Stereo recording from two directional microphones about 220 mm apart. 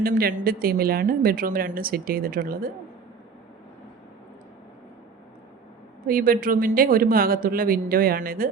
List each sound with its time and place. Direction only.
0.0 s speech: 40° right (ahead or behind)
6.1 s speech: 40° right (ahead or behind)